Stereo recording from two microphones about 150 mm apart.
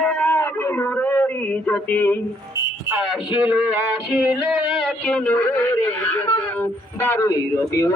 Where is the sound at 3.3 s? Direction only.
10° right (ahead or behind).